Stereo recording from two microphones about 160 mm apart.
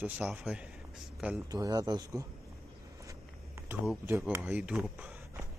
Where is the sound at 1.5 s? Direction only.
20° right (ahead or behind).